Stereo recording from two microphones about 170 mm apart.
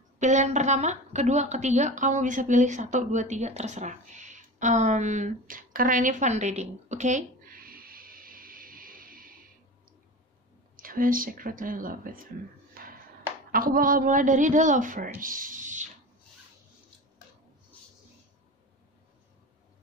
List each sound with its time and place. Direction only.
0.2 s a woman's voice: 45° right (ahead or behind)
10.8 s speech: 55° right (ahead or behind)
12.8 s a sound: 60° right (ahead or behind)
13.5 s a woman's voice: 55° right (ahead or behind)